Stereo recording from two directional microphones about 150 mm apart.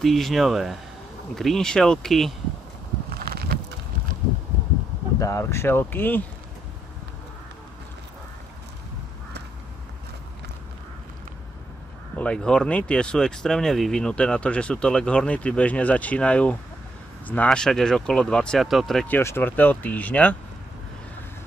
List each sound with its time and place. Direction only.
0.0 s speech: centre (ahead or behind)
3.1 s a sound: 90° right
5.2 s speech: 20° left (ahead or behind)
12.2 s speech: 5° left (ahead or behind)
19.1 s speech: 15° left (ahead or behind)